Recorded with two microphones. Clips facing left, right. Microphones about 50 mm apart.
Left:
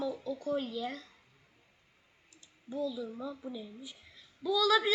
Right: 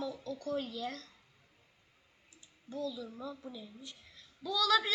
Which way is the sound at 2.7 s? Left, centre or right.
Centre.